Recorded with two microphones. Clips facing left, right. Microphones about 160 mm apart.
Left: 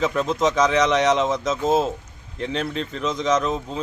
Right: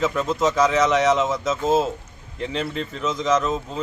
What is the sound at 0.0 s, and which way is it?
Speech, 15° left (ahead or behind).